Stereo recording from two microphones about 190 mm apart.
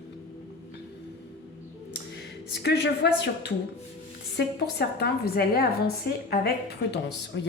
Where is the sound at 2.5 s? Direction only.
65° left (ahead or behind).